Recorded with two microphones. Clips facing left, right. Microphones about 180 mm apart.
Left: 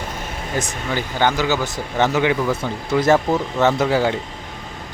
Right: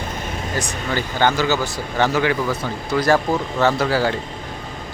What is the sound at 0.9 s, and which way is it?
Speech, 15° left (ahead or behind).